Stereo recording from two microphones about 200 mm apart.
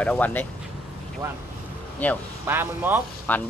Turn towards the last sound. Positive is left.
turn(degrees=10)  # may be behind; listen again after turning